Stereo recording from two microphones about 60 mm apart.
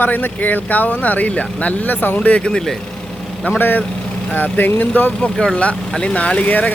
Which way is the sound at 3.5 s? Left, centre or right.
Left.